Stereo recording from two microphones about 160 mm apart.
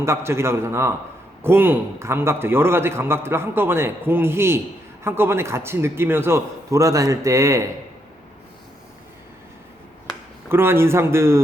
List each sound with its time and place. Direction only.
0.0 s a man's voice: 15° right (ahead or behind)
10.5 s a man's voice: 15° right (ahead or behind)